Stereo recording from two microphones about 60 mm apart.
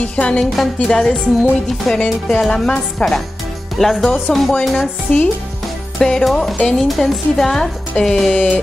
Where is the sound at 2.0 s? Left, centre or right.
Centre.